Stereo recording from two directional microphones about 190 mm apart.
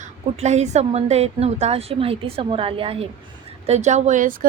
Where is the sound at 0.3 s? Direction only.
35° right (ahead or behind).